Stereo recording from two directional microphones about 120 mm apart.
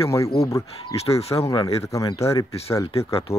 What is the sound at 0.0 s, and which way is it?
Speech, 25° left (ahead or behind).